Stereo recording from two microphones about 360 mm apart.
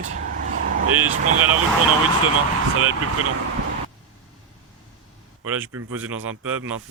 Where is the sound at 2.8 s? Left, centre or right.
Right.